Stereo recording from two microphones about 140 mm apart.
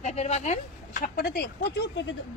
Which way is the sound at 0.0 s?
50° left (ahead or behind).